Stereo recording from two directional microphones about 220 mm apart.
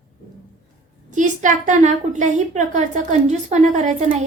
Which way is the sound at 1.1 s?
35° right (ahead or behind).